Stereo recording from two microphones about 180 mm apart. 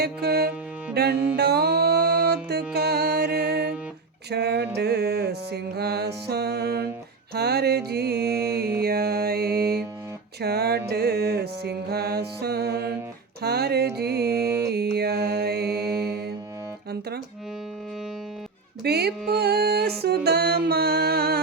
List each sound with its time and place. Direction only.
0.0 s music: 60° right (ahead or behind)
1.1 s music: 10° right (ahead or behind)
1.4 s music: 60° right (ahead or behind)
14.4 s music: 15° right (ahead or behind)
14.7 s music: 60° right (ahead or behind)
18.8 s music: 60° right (ahead or behind)